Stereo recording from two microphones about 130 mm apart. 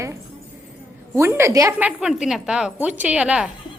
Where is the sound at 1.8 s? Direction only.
5° right (ahead or behind).